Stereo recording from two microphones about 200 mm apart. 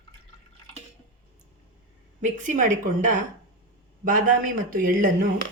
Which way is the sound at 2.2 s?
40° right (ahead or behind).